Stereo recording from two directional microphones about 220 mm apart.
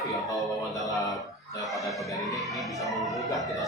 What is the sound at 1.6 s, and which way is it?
Speech, centre (ahead or behind).